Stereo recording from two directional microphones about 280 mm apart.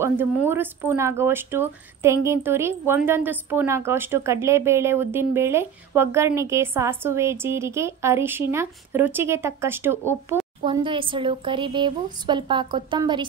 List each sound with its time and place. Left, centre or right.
0.0 s speech: centre